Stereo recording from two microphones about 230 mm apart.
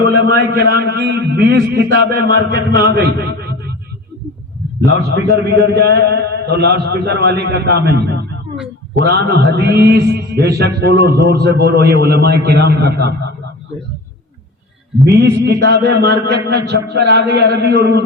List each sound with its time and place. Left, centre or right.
0.1 s a man's voice: right
5.1 s a man's voice: right
15.0 s a man's voice: right